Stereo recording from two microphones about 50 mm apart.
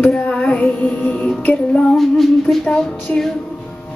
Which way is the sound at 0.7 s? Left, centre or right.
Left.